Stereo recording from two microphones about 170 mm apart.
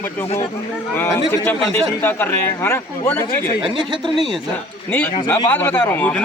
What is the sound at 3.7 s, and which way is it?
Speech, 30° right (ahead or behind).